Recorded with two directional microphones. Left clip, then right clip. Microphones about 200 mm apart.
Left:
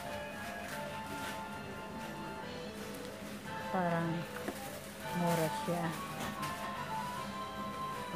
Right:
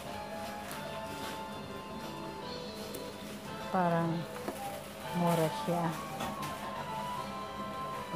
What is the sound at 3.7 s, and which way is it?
Speech, 25° right (ahead or behind).